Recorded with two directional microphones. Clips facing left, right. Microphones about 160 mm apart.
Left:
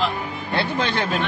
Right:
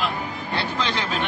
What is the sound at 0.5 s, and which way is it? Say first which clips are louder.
Speech: left 4 dB; 55° left (ahead or behind).